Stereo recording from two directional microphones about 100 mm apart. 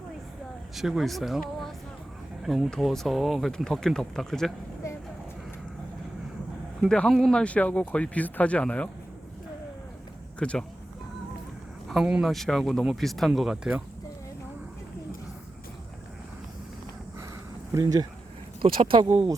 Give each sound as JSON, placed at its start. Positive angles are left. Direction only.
{"t": 0.8, "sound": "speech", "side_deg": 0}
{"t": 6.8, "sound": "speech", "side_deg": 10}
{"t": 10.4, "sound": "speech", "side_deg": 10}
{"t": 12.2, "sound": "speech", "side_deg": 0}
{"t": 17.7, "sound": "speech", "side_deg": -30}
{"t": 18.6, "sound": "speech", "side_deg": -55}